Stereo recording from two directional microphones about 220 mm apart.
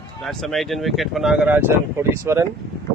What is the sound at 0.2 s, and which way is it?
Speech, centre (ahead or behind).